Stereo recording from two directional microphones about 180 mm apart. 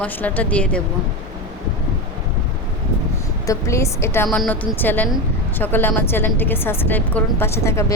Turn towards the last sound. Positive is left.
turn(degrees=15)  # may be behind; listen again after turning